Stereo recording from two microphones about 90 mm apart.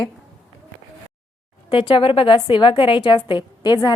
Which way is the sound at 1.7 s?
75° left (ahead or behind).